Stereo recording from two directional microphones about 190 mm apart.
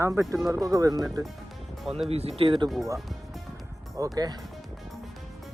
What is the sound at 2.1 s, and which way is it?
Speech, 30° right (ahead or behind).